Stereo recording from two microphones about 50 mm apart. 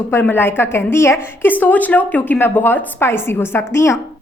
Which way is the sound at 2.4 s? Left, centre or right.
Left.